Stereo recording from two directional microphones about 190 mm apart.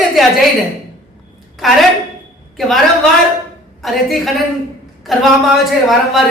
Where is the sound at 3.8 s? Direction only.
Centre (ahead or behind).